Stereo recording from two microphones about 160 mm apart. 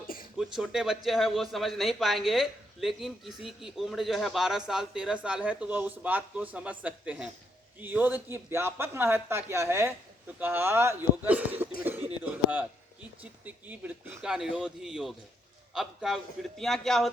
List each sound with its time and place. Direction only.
0.3 s speech: 5° right (ahead or behind)
11.9 s a sound: 10° right (ahead or behind)
13.4 s speech: 10° right (ahead or behind)